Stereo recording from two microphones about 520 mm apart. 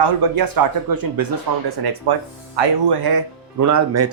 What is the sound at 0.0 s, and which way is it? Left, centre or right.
Speech, right.